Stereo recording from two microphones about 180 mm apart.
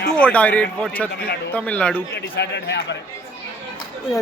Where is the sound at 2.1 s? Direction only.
70° left (ahead or behind).